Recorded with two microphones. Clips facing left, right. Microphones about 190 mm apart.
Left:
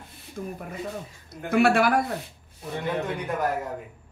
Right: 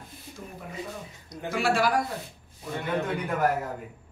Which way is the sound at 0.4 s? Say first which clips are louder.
Left 5 dB; 50° left (ahead or behind).